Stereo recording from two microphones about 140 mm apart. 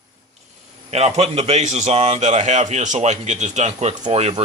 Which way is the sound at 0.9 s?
50° right (ahead or behind).